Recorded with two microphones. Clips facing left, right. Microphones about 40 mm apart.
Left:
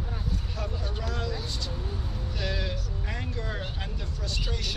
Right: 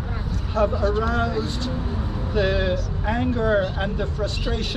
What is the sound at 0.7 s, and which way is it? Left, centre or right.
Speech, right.